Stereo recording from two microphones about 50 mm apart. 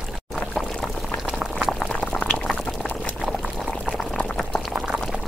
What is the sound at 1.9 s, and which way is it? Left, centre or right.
Boiling, centre.